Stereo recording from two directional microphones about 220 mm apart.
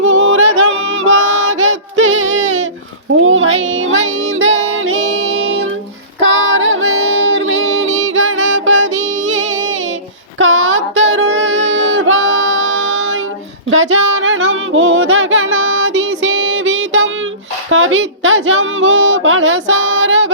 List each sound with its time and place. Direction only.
0.0 s music: 60° right (ahead or behind)
3.2 s child singing: 65° right (ahead or behind)
6.1 s female singing: 60° right (ahead or behind)
10.3 s a sound: 60° right (ahead or behind)